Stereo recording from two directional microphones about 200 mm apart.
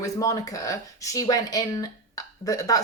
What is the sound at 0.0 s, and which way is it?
Speech, 15° left (ahead or behind).